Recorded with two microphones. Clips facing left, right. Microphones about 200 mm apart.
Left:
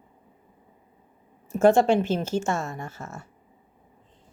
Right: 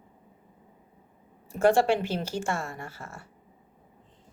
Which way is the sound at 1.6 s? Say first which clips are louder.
Left 4 dB; 20° left (ahead or behind).